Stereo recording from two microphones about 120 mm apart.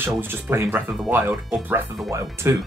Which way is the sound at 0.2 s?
20° right (ahead or behind).